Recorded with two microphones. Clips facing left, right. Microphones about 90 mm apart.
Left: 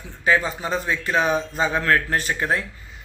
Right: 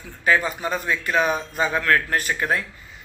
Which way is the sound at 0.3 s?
30° left (ahead or behind).